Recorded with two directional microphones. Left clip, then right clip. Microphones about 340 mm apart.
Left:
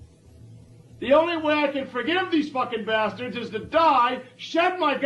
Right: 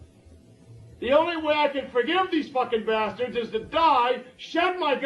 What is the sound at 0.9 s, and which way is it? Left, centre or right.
A man's voice, left.